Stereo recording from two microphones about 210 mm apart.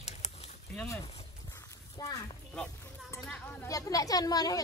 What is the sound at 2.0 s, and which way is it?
Speech, 15° left (ahead or behind).